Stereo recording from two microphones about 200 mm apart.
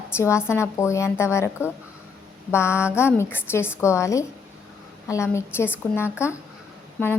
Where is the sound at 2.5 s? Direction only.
15° left (ahead or behind).